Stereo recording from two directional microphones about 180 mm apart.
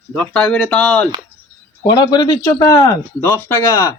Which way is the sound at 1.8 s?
25° left (ahead or behind).